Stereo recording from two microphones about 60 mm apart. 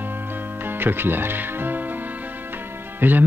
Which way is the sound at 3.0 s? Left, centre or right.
Right.